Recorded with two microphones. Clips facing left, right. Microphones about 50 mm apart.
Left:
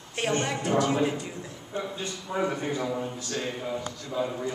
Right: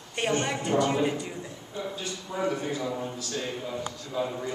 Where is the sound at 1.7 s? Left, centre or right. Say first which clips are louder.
Left 2 dB; left.